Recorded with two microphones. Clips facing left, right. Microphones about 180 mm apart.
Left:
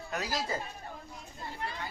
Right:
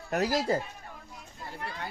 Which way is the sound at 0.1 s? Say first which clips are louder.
Right 8 dB; 55° right (ahead or behind).